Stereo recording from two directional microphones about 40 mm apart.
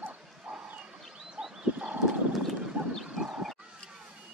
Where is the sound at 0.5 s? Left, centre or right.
Right.